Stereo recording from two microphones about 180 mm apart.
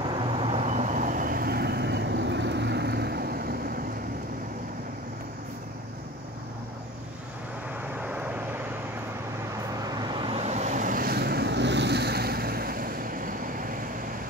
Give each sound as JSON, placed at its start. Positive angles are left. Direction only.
{"t": 0.0, "sound": "vehicle", "side_deg": -25}
{"t": 8.0, "sound": "vehicle", "side_deg": -10}
{"t": 9.8, "sound": "vehicle", "side_deg": -20}